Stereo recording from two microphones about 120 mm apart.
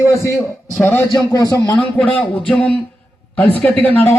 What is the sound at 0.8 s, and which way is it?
Speech, 15° left (ahead or behind).